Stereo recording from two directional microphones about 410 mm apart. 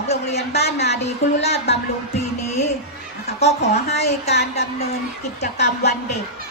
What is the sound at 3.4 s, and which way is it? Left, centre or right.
A woman's voice, centre.